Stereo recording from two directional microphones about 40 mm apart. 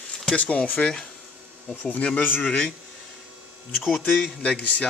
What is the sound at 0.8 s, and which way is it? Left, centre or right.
Speech, left.